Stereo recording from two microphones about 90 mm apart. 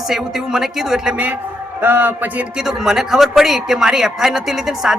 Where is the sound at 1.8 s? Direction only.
20° right (ahead or behind).